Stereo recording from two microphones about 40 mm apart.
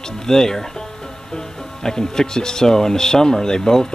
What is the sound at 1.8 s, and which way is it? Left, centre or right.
Speech, centre.